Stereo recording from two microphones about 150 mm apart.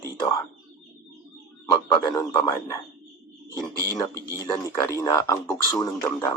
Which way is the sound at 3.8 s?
20° left (ahead or behind).